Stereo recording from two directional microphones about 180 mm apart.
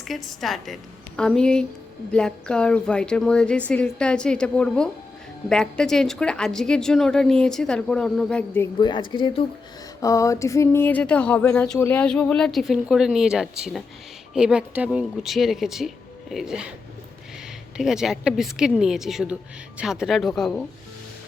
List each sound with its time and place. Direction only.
0.0 s a woman's voice: centre (ahead or behind)
8.8 s a woman's voice: 25° left (ahead or behind); by 16.6 s centre (ahead or behind)
17.7 s a woman's voice: 5° right (ahead or behind)